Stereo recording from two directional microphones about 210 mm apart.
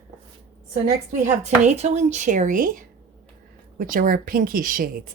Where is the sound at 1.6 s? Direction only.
30° right (ahead or behind).